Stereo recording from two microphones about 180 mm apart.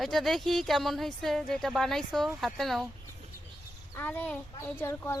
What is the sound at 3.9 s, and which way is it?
Speech, 10° left (ahead or behind).